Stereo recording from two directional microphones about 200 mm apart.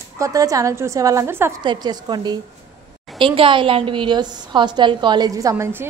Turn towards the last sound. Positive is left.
turn(degrees=-10)  # may be behind; listen again after turning